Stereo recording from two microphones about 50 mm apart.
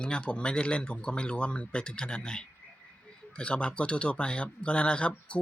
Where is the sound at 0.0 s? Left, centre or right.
Left.